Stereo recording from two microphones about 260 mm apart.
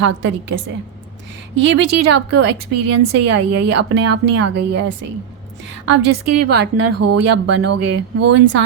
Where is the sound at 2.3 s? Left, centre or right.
Right.